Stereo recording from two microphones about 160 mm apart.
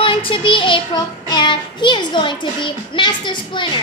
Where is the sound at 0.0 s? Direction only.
35° left (ahead or behind).